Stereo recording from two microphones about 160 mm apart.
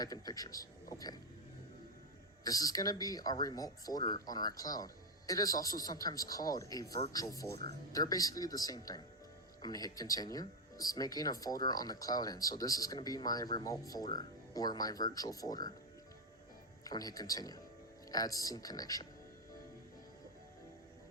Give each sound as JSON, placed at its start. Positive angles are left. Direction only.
{"t": 0.0, "sound": "speech", "side_deg": 25}
{"t": 2.4, "sound": "speech", "side_deg": 20}
{"t": 16.8, "sound": "speech", "side_deg": 25}